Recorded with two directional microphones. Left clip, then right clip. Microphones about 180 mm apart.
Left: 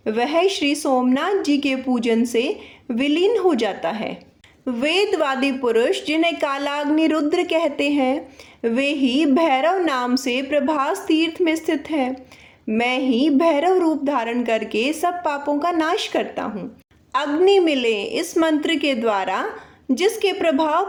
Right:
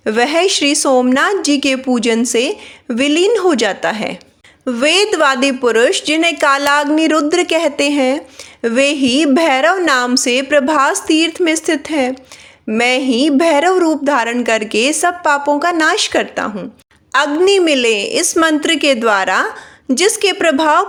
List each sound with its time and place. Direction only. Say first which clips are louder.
0.0 s speech: right 6 dB; 20° right (ahead or behind)